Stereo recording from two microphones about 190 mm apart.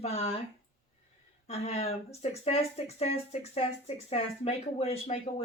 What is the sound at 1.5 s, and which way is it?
Speech, 35° left (ahead or behind).